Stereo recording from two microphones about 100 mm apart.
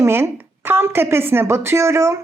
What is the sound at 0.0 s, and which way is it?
Speech, 25° right (ahead or behind).